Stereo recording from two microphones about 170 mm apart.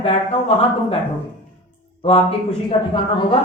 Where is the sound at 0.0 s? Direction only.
35° left (ahead or behind).